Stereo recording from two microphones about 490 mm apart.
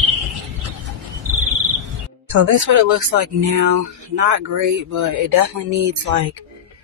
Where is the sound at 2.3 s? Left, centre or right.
Right.